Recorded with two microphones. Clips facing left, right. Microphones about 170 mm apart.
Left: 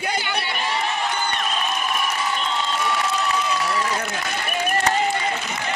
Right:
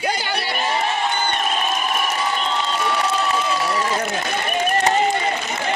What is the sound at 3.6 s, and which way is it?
Run, 25° right (ahead or behind).